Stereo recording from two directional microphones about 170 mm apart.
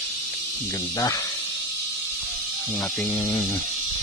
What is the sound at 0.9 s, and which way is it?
Speech, 20° left (ahead or behind).